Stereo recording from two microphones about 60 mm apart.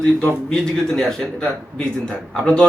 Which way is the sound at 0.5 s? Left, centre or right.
Centre.